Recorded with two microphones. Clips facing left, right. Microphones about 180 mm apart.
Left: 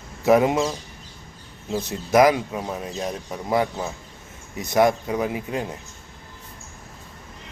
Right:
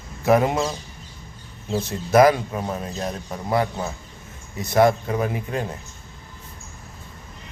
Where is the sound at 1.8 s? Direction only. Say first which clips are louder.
Right 1 dB; 15° left (ahead or behind).